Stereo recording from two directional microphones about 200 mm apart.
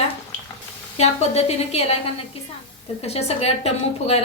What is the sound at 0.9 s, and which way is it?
A woman's voice, 30° left (ahead or behind).